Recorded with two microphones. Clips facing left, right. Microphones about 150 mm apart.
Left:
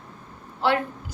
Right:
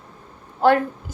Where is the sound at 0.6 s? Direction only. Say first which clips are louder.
Right 6 dB; 45° right (ahead or behind).